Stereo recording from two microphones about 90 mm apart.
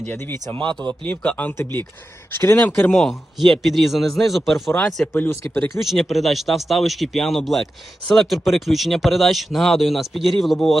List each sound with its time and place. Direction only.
0.1 s speech: 25° left (ahead or behind)
0.8 s speech: 15° left (ahead or behind)
2.8 s speech: 5° left (ahead or behind)
5.1 s speech: 20° left (ahead or behind)
5.7 s speech: centre (ahead or behind)